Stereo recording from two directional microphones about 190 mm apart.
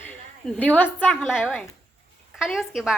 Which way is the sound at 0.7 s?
10° left (ahead or behind).